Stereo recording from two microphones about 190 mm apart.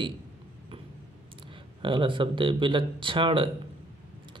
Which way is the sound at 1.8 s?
25° right (ahead or behind).